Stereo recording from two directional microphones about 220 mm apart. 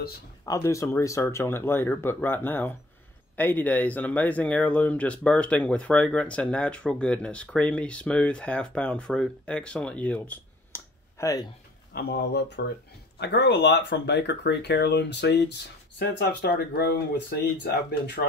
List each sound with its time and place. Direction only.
0.5 s speech: 15° left (ahead or behind)
11.9 s speech: 50° left (ahead or behind)